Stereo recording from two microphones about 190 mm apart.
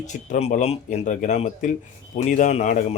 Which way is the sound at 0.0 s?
40° left (ahead or behind).